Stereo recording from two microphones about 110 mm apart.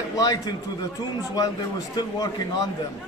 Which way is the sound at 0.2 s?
35° left (ahead or behind).